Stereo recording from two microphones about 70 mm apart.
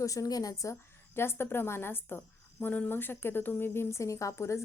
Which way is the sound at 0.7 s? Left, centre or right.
Left.